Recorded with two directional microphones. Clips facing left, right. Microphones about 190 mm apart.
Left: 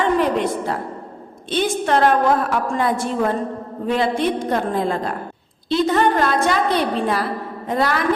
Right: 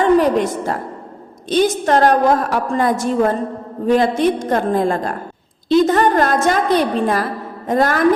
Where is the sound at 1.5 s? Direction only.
40° right (ahead or behind).